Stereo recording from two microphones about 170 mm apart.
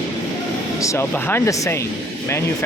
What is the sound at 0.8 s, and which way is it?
Speech, 15° left (ahead or behind).